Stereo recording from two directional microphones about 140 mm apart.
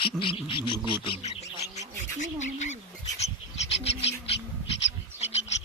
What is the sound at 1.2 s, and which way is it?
Speech, 50° left (ahead or behind).